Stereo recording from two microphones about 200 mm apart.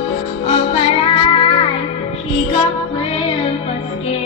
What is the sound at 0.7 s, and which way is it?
Music, 30° left (ahead or behind).